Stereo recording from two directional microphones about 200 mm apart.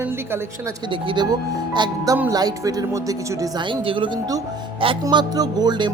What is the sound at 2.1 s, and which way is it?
Speech, 10° right (ahead or behind).